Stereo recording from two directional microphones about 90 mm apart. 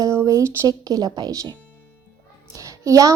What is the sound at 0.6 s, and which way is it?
Speech, 45° right (ahead or behind).